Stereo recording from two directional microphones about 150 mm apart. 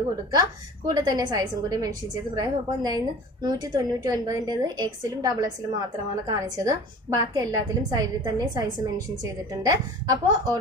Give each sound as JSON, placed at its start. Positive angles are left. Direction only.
{"t": 0.3, "sound": "a woman's voice", "side_deg": -25}